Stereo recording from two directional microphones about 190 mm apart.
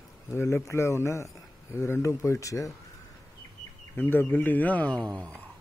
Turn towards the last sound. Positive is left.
turn(degrees=-20)  # may be behind; listen again after turning